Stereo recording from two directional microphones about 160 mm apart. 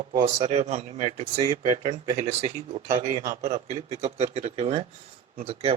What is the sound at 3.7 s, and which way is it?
Speech, 45° right (ahead or behind).